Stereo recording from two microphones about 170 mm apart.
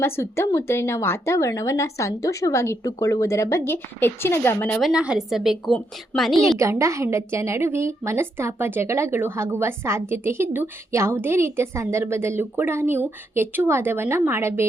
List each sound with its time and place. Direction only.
0.0 s speech: 15° left (ahead or behind)
4.8 s a woman's voice: 5° right (ahead or behind)
6.6 s a woman's voice: 15° right (ahead or behind)